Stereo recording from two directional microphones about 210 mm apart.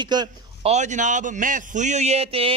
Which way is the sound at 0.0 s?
20° right (ahead or behind).